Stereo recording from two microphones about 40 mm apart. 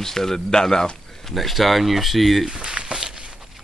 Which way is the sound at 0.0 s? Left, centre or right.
Centre.